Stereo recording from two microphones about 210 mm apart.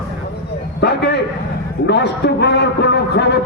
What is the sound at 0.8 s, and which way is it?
A man's voice, 50° left (ahead or behind).